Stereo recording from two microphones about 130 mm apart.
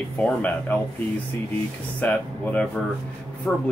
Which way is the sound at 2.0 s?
10° left (ahead or behind).